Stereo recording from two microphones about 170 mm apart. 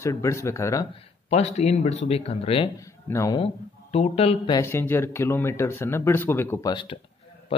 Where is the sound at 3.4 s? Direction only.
40° left (ahead or behind).